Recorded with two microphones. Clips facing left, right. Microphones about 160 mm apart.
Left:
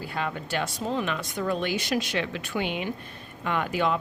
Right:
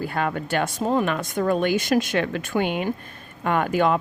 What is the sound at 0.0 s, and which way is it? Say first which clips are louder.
Speech: right 6 dB; 55° right (ahead or behind).